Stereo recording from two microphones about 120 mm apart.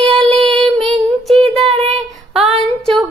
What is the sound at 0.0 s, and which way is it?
Child singing, 55° right (ahead or behind).